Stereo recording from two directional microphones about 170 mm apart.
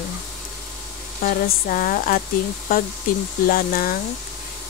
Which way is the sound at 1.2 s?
55° left (ahead or behind).